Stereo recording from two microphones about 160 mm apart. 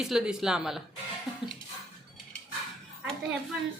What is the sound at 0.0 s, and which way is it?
Speech, 5° right (ahead or behind).